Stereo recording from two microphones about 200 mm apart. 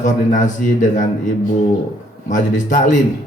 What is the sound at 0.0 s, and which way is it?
Speech, 40° left (ahead or behind).